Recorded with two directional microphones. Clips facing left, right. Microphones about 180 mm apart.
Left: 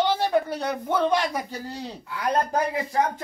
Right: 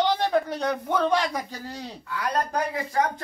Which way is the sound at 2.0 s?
25° left (ahead or behind).